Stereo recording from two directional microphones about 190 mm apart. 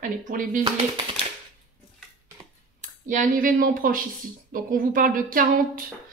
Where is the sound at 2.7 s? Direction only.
40° right (ahead or behind).